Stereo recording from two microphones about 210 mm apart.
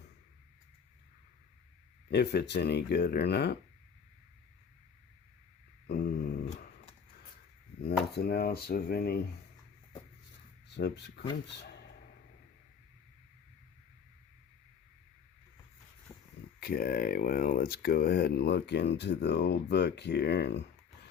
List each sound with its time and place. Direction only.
2.0 s speech: 55° left (ahead or behind)
5.9 s a sound: 50° left (ahead or behind)
8.1 s speech: 45° left (ahead or behind)
10.8 s speech: 55° left (ahead or behind)
16.6 s speech: 45° left (ahead or behind)